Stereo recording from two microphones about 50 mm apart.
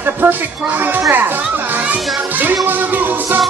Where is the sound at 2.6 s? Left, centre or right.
Right.